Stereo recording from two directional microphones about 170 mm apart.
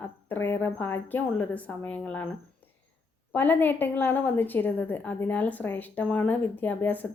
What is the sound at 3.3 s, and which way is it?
A woman's voice, 10° left (ahead or behind).